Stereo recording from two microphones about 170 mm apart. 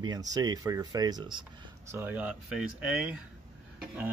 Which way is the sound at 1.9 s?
10° right (ahead or behind).